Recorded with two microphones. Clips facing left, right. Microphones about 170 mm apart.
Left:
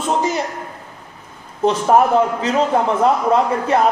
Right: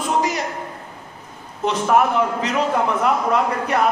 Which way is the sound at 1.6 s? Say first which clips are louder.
Left 4 dB; 35° left (ahead or behind).